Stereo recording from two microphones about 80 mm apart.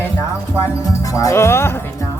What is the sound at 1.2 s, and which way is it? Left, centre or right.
Music, left.